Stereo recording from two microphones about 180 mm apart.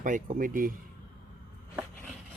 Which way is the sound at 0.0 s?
45° right (ahead or behind).